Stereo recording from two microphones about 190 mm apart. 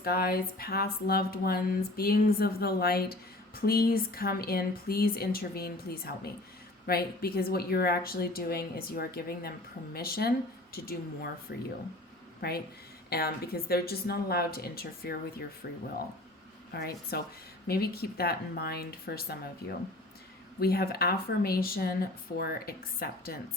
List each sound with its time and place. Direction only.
0.0 s a woman's voice: 55° left (ahead or behind)
16.7 s a woman's voice: 55° left (ahead or behind)
20.6 s speech: 55° left (ahead or behind)